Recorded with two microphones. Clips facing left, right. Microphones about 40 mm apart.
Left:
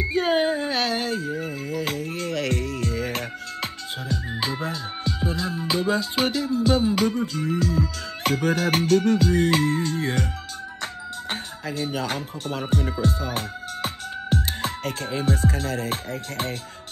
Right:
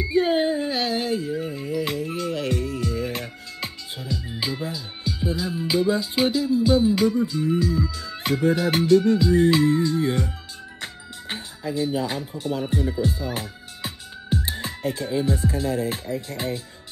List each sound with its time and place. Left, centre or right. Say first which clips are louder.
0.0 s music: right 2 dB; left
0.3 s a sound: even; left
0.7 s music: even; left
4.3 s music: left 1 dB; centre
4.6 s music: left 2 dB; left
5.4 s music: right 4 dB; centre
6.1 s music: right 2 dB; left
7.1 s music: right 3 dB; left
12.8 s speech: even; left